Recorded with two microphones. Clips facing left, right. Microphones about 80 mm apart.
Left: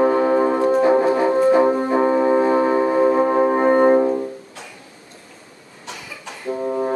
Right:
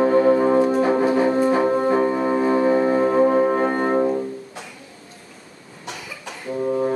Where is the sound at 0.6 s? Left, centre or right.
Centre.